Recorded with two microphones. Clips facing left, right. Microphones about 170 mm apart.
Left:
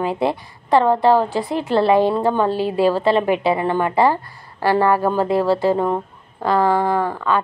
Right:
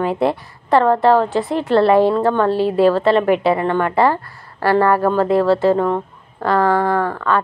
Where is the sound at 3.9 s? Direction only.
25° left (ahead or behind).